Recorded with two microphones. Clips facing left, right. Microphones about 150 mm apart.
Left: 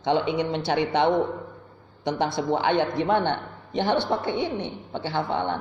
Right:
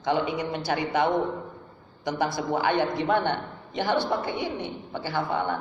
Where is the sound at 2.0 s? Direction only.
25° left (ahead or behind).